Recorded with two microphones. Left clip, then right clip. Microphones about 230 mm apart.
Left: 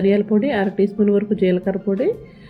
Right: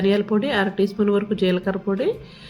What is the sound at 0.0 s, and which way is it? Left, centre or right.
A woman's voice, centre.